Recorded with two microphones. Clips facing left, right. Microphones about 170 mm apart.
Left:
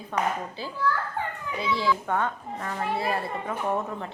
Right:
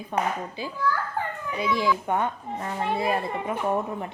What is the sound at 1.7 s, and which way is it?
A woman's voice, 15° right (ahead or behind).